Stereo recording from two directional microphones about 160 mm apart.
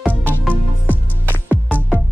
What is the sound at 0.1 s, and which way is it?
Music, 10° left (ahead or behind).